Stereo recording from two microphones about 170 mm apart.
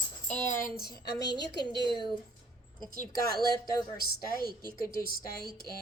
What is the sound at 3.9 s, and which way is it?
A woman's voice, 60° left (ahead or behind).